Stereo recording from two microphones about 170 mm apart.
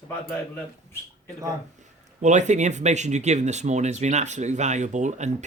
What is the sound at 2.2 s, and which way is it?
Speech, 45° right (ahead or behind).